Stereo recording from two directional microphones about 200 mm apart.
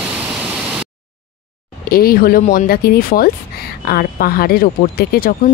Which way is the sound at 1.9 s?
50° left (ahead or behind).